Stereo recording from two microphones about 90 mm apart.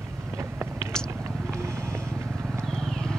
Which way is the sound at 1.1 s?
35° right (ahead or behind).